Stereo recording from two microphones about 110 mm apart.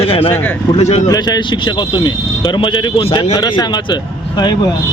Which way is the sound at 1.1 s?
40° left (ahead or behind).